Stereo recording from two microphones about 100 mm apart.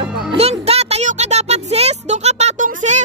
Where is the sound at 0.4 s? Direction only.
90° right.